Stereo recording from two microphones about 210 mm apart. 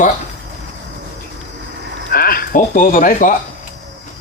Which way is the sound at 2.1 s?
45° left (ahead or behind).